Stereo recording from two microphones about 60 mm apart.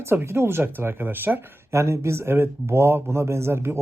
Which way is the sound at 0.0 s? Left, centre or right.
Right.